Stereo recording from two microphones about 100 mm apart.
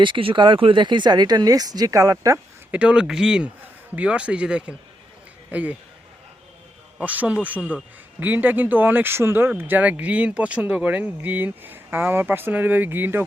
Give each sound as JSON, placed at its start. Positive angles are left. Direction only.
{"t": 0.0, "sound": "speech", "side_deg": -60}
{"t": 2.7, "sound": "speech", "side_deg": -10}
{"t": 7.0, "sound": "speech", "side_deg": -15}